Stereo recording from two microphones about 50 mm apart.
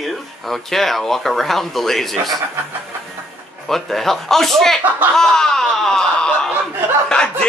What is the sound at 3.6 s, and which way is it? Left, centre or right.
Speech, centre.